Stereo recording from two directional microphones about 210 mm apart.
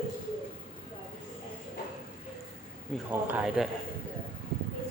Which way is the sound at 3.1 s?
10° right (ahead or behind).